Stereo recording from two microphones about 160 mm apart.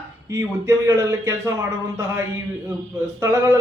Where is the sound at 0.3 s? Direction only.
20° right (ahead or behind).